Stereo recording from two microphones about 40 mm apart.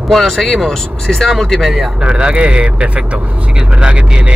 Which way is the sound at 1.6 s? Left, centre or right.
Centre.